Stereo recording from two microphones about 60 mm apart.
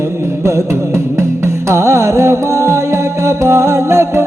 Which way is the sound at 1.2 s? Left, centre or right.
Right.